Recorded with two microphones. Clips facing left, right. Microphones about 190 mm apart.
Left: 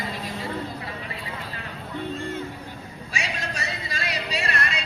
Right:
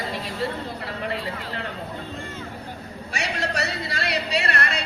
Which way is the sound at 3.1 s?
70° right (ahead or behind).